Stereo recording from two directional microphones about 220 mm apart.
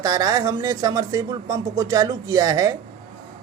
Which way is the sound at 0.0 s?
15° right (ahead or behind).